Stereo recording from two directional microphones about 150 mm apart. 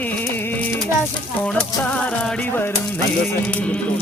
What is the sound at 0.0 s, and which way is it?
Music, 10° left (ahead or behind).